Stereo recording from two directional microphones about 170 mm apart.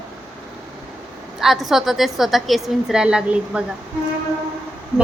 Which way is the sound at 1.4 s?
Centre (ahead or behind).